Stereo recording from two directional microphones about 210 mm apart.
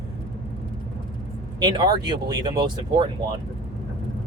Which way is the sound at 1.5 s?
20° right (ahead or behind).